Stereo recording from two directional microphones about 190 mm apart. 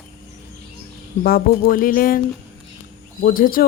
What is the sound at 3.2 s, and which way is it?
Speech, 45° left (ahead or behind).